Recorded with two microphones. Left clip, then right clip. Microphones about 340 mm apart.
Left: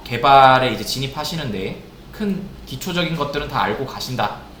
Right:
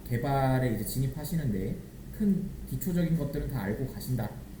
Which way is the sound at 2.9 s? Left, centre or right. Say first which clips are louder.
Left 13 dB; left.